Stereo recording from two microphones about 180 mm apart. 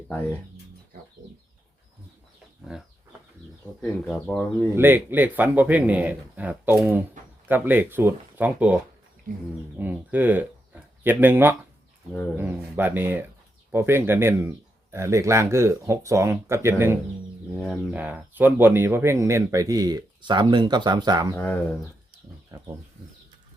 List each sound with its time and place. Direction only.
0.1 s speech: 10° left (ahead or behind)
2.7 s speech: 5° right (ahead or behind)
4.7 s speech: 10° right (ahead or behind)
21.3 s speech: 10° left (ahead or behind)